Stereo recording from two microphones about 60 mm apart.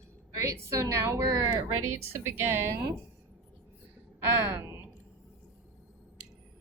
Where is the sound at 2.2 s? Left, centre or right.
Right.